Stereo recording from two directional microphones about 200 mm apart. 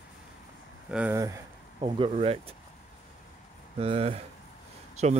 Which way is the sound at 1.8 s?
25° right (ahead or behind).